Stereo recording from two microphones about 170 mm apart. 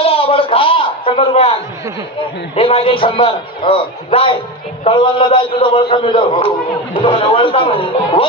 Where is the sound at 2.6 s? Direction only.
35° left (ahead or behind).